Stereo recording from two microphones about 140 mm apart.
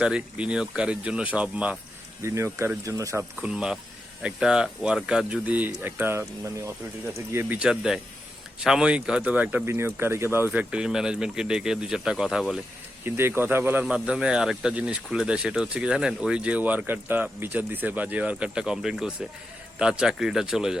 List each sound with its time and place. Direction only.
0.0 s speech: 5° right (ahead or behind)
2.2 s speech: 20° right (ahead or behind)
3.4 s speech: 5° right (ahead or behind)
7.3 s speech: 15° right (ahead or behind)
13.1 s speech: 15° right (ahead or behind)